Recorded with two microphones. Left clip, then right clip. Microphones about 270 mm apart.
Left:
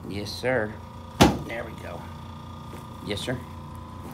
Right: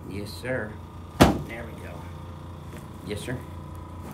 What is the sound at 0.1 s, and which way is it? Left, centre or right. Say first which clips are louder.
Speech: left 5 dB; centre.